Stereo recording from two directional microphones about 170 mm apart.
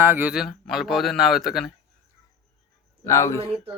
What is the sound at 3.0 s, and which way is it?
Speech, 15° left (ahead or behind).